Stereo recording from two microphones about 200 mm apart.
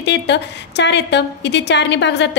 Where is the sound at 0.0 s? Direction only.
60° left (ahead or behind).